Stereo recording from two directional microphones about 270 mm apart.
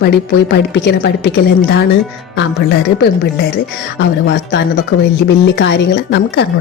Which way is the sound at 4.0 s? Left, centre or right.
Left.